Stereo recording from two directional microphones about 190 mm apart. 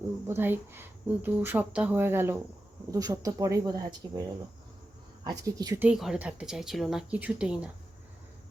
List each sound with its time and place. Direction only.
0.3 s a woman's voice: 10° right (ahead or behind)
5.9 s a woman's voice: 5° right (ahead or behind)